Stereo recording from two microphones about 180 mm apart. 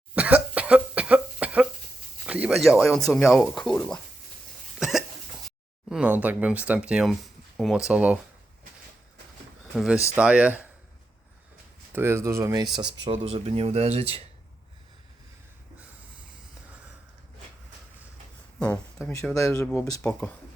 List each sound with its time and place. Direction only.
0.1 s cough: 10° right (ahead or behind)
2.2 s speech: 5° right (ahead or behind)
4.8 s hiccup: centre (ahead or behind)
5.5 s speech: 5° right (ahead or behind)
9.7 s speech: 5° right (ahead or behind)
11.9 s speech: 15° right (ahead or behind); by 14.3 s 35° right (ahead or behind)
19.5 s speech: 10° left (ahead or behind)